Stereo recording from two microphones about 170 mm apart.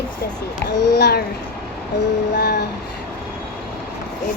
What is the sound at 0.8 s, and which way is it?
Speech, 80° left.